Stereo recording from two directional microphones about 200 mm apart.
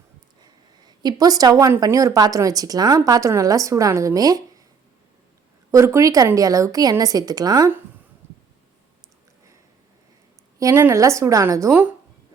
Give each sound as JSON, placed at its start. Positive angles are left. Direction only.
{"t": 0.4, "sound": "a woman's voice", "side_deg": -20}
{"t": 5.7, "sound": "a woman's voice", "side_deg": -15}
{"t": 10.6, "sound": "a woman's voice", "side_deg": -15}